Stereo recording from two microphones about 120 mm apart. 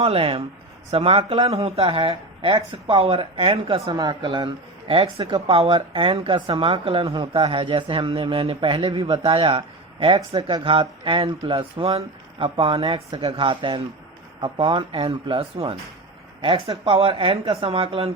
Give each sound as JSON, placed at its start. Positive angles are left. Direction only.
{"t": 0.0, "sound": "speech", "side_deg": -50}
{"t": 3.9, "sound": "speech", "side_deg": -35}